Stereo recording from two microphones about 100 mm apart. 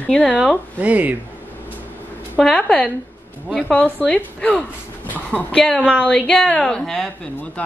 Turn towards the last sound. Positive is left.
turn(degrees=5)  # may be behind; listen again after turning